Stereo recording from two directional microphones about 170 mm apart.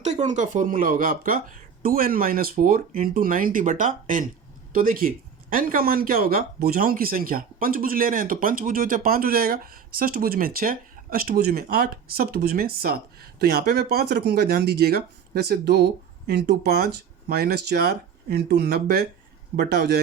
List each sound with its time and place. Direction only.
0.0 s speech: 45° right (ahead or behind); by 20.0 s 70° right (ahead or behind)